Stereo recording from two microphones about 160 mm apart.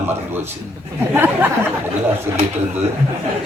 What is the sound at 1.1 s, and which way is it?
Speech, 10° right (ahead or behind).